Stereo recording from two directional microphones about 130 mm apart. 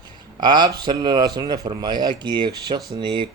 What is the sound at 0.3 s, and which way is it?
Speech, 35° right (ahead or behind).